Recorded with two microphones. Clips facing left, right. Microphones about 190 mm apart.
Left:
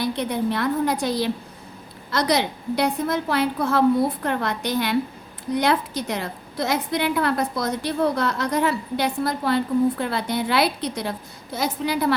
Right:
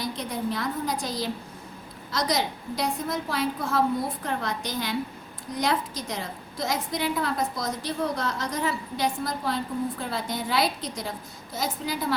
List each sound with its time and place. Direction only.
0.0 s a woman's voice: 65° left (ahead or behind)